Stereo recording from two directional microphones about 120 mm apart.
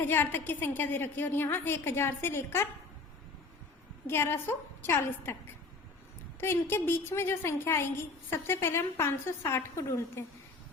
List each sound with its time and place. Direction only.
0.0 s a woman's voice: 15° left (ahead or behind)
4.0 s a woman's voice: 20° left (ahead or behind)
6.4 s a woman's voice: 20° left (ahead or behind)